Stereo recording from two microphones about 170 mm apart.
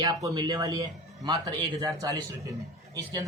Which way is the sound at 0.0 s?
20° right (ahead or behind).